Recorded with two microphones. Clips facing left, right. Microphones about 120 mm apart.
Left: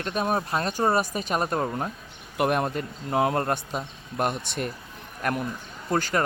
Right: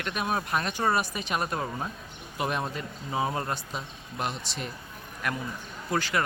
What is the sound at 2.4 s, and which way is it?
Speech, 55° left (ahead or behind).